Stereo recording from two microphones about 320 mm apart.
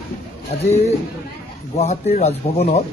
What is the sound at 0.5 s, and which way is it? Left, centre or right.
Speech, centre.